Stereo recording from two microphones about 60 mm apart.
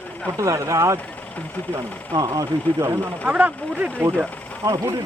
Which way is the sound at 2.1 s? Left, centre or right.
Right.